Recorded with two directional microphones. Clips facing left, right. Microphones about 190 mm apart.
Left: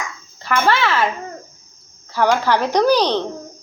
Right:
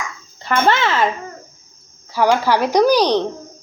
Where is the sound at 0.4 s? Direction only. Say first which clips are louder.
Right 1 dB; 25° right (ahead or behind).